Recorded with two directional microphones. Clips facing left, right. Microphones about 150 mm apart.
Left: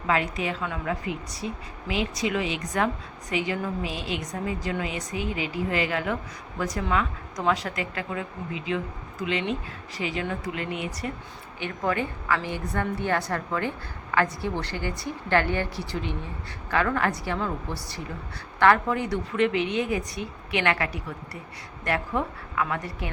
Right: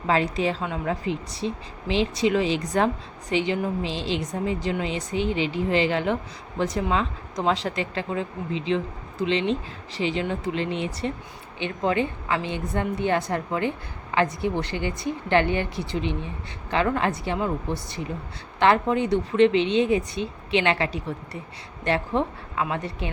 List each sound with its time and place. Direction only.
0.1 s a woman's voice: 30° right (ahead or behind)